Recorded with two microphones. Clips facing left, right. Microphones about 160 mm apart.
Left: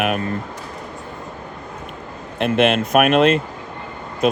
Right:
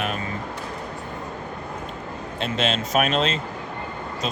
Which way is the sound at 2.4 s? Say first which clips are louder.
Left 8 dB; 60° left (ahead or behind).